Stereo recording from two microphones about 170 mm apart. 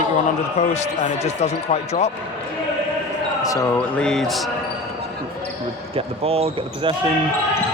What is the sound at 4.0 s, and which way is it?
Speech, 5° left (ahead or behind).